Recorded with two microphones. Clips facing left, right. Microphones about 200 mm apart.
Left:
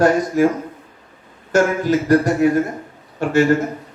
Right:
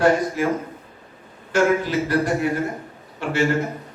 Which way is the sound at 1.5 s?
45° left (ahead or behind).